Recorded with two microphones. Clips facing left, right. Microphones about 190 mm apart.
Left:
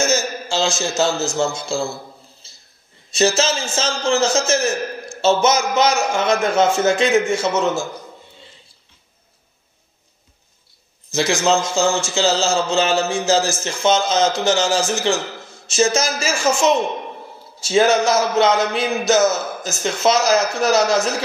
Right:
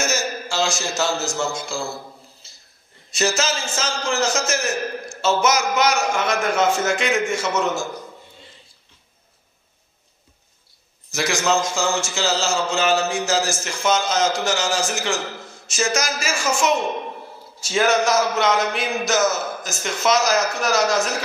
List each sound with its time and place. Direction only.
0.1 s a man's voice: 25° left (ahead or behind)
3.1 s a man's voice: 25° left (ahead or behind)
11.1 s a man's voice: 30° left (ahead or behind)